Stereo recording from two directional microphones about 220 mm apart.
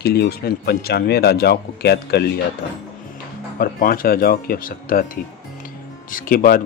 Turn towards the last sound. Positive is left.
turn(degrees=40)  # may be behind; listen again after turning